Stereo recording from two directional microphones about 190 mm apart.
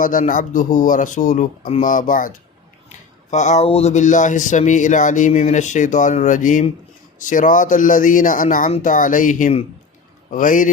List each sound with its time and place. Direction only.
0.0 s speech: 45° left (ahead or behind)